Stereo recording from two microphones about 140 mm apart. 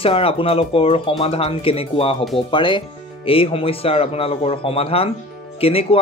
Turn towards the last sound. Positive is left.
turn(degrees=45)  # may be behind; listen again after turning